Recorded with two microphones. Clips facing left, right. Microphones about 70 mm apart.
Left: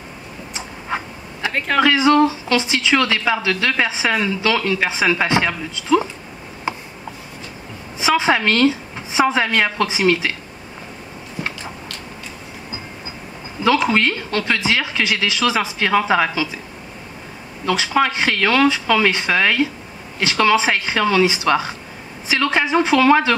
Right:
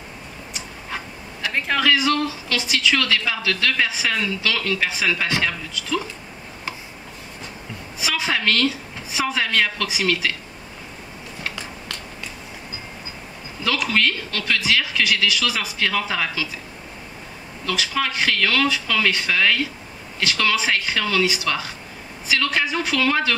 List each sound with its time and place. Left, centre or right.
0.6 s a sound: left
1.8 s speech: left
8.0 s a woman's voice: left
13.7 s speech: left
17.6 s speech: left